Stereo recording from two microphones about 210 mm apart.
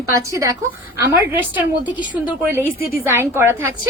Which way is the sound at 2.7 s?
45° left (ahead or behind).